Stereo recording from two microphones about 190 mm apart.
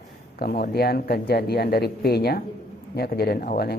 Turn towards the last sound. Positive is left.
turn(degrees=55)  # may be behind; listen again after turning